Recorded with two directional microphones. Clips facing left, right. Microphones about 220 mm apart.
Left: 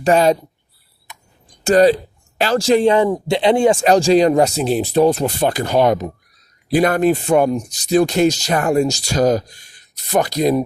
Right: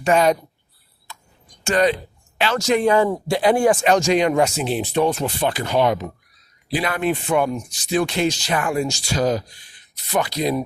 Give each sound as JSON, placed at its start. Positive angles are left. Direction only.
{"t": 0.0, "sound": "speech", "side_deg": 35}
{"t": 1.1, "sound": "a sound", "side_deg": 20}
{"t": 1.6, "sound": "speech", "side_deg": 35}